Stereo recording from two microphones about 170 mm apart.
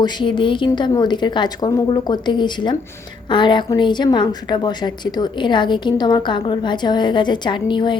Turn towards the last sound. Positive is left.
turn(degrees=25)  # may be behind; listen again after turning